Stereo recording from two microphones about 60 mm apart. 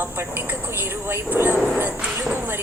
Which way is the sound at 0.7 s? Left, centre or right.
Right.